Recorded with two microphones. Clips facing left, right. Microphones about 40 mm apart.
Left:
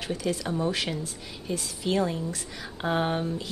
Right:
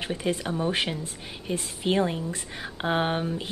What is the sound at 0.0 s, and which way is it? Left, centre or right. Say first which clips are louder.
Speech: right 1 dB; right.